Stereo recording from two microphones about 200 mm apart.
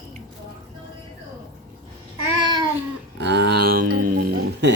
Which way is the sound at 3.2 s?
60° right (ahead or behind).